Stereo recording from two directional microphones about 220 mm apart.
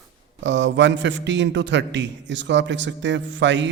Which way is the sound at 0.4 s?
55° right (ahead or behind).